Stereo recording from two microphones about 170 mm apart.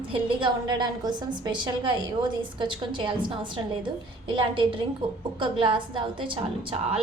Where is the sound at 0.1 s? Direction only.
30° right (ahead or behind).